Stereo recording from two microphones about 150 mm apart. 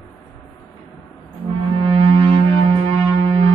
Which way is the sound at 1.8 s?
40° right (ahead or behind).